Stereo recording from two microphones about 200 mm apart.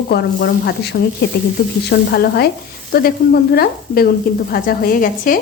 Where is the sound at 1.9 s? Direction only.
50° left (ahead or behind).